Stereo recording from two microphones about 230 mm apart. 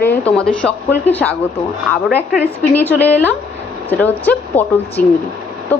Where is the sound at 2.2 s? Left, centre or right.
Centre.